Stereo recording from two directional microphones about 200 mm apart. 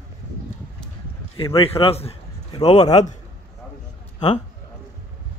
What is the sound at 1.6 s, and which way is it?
A man's voice, 30° left (ahead or behind).